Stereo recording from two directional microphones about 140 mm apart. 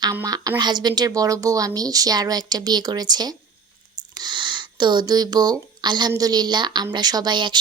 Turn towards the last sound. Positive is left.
turn(degrees=-35)  # may be behind; listen again after turning